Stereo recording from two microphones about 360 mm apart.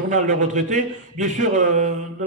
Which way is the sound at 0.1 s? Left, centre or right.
Right.